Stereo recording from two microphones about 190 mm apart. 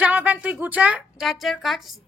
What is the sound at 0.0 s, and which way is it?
Speech, 10° right (ahead or behind).